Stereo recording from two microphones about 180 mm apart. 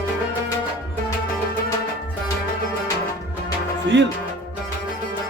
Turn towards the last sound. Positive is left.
turn(degrees=-80)